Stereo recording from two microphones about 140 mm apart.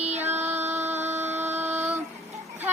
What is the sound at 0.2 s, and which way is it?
Music, 15° right (ahead or behind).